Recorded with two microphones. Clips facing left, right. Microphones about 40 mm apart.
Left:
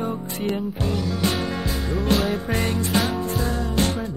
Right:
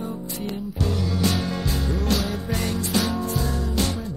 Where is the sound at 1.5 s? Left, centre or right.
Left.